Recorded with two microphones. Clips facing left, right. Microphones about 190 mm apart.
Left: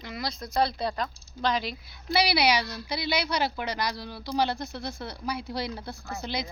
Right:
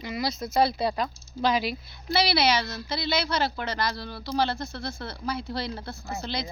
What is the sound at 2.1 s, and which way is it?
Speech, 15° left (ahead or behind).